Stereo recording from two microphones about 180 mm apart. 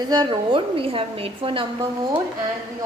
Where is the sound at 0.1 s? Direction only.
25° right (ahead or behind).